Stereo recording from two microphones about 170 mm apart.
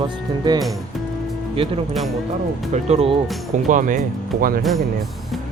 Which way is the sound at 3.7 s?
50° right (ahead or behind).